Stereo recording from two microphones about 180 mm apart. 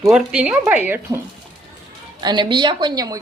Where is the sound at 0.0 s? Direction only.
5° right (ahead or behind).